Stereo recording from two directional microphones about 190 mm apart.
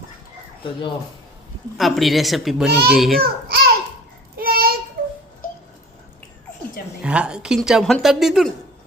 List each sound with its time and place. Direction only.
0.6 s speech: 25° left (ahead or behind)
1.8 s a woman's voice: centre (ahead or behind)
2.6 s a child's voice: 55° right (ahead or behind)
2.9 s a woman's voice: centre (ahead or behind)
3.2 s a sound: 55° right (ahead or behind)
7.0 s a woman's voice: 5° right (ahead or behind)